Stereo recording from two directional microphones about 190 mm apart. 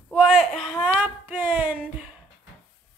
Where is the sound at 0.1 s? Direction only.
5° right (ahead or behind).